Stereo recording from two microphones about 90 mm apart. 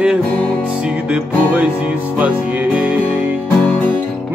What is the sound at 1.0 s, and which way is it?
Music, 15° right (ahead or behind).